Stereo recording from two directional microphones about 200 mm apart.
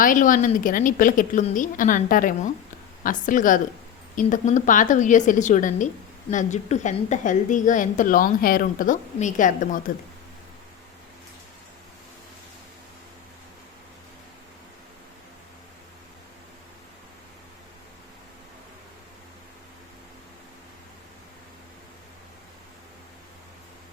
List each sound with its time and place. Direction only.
0.0 s a woman's voice: 40° left (ahead or behind)